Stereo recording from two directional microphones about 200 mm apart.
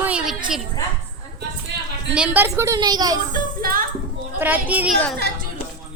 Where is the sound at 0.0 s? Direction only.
5° right (ahead or behind).